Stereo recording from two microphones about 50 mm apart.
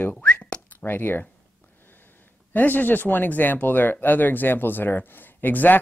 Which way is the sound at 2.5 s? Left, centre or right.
Left.